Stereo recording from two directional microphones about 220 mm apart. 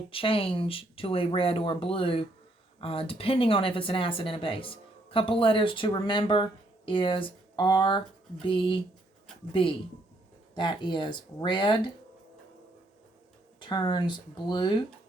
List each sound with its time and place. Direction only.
0.1 s speech: 25° left (ahead or behind)
13.6 s speech: 20° left (ahead or behind)